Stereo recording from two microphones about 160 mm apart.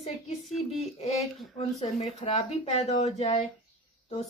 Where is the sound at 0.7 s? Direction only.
40° left (ahead or behind).